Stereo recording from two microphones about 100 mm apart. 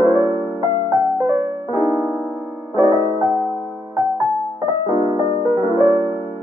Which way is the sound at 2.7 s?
30° right (ahead or behind).